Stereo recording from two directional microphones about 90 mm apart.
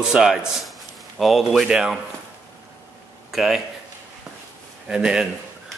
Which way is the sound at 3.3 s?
5° right (ahead or behind).